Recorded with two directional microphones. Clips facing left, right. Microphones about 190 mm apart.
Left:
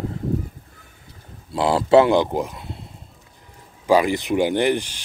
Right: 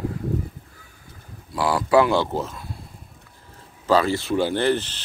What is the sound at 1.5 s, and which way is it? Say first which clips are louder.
Speech: left 4 dB; 25° left (ahead or behind).